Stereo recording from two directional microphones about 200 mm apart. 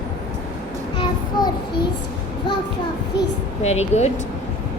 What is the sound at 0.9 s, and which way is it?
Child singing, 20° left (ahead or behind).